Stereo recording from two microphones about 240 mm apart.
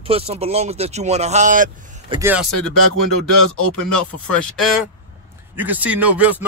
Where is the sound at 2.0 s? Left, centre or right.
Centre.